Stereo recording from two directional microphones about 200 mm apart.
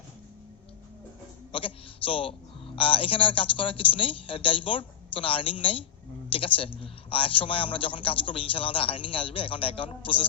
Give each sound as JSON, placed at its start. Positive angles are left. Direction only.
{"t": 1.5, "sound": "a man's voice", "side_deg": 25}